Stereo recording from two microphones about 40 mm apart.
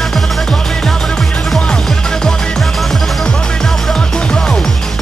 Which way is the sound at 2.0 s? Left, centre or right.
Centre.